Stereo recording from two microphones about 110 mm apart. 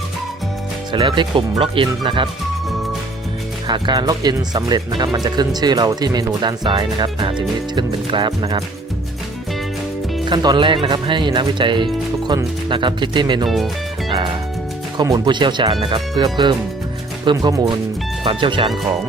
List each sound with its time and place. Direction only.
0.9 s speech: 45° right (ahead or behind)
3.7 s speech: 40° right (ahead or behind)
10.2 s speech: 40° right (ahead or behind)
15.0 s speech: 40° right (ahead or behind)
18.3 s speech: 50° right (ahead or behind)